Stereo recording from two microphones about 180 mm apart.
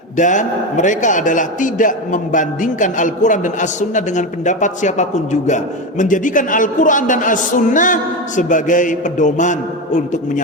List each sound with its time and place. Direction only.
0.2 s a man's voice: 45° left (ahead or behind)